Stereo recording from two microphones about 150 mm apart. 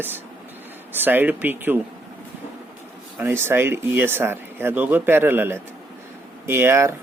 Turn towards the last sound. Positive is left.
turn(degrees=-15)  # may be behind; listen again after turning